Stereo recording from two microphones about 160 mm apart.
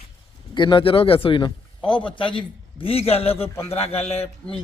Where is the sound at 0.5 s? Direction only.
30° left (ahead or behind).